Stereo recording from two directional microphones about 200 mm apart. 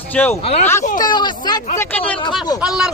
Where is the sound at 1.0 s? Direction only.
20° left (ahead or behind).